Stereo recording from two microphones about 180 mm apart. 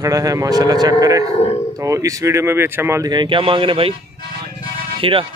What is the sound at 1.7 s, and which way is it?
Speech, 20° right (ahead or behind).